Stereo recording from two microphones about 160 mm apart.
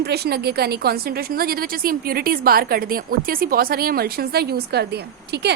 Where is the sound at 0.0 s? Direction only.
90° right.